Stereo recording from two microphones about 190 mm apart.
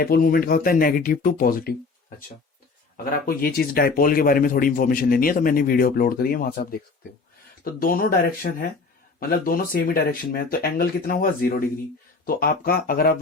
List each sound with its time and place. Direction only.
0.0 s speech: 50° left (ahead or behind)